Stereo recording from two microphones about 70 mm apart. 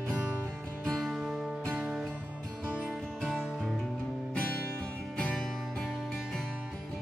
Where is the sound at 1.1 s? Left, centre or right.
Centre.